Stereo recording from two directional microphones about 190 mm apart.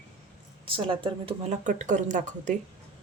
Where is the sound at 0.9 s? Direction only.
30° right (ahead or behind).